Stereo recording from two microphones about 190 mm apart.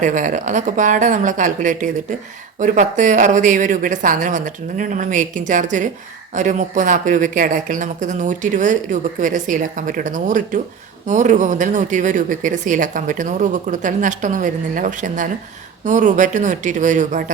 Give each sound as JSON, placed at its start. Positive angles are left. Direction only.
{"t": 0.0, "sound": "speech", "side_deg": -40}